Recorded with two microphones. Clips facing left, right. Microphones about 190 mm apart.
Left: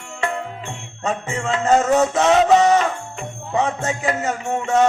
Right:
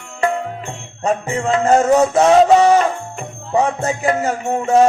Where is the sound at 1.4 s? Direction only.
30° right (ahead or behind).